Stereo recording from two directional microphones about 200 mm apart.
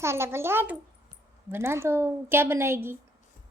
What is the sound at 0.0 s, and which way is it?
A child's voice, 15° right (ahead or behind).